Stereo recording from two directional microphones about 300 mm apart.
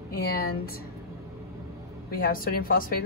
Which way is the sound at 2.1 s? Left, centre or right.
Left.